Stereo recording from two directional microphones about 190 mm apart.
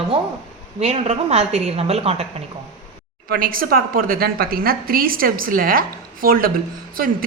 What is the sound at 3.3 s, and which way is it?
A woman's voice, 50° right (ahead or behind).